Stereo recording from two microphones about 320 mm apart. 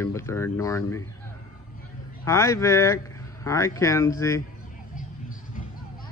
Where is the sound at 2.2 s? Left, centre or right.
Centre.